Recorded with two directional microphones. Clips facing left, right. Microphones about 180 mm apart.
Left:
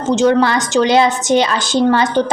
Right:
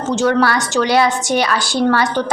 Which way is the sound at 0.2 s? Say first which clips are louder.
Left 2 dB; 20° left (ahead or behind).